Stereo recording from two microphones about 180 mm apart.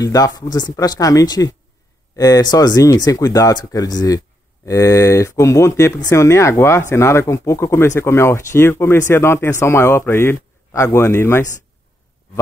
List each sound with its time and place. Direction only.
0.0 s speech: 20° left (ahead or behind)